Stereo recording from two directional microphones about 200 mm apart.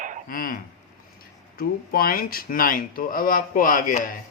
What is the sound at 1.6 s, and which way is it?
Speech, 45° left (ahead or behind).